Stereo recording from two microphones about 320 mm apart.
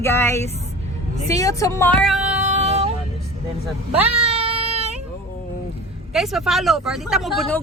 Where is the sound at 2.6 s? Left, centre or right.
Centre.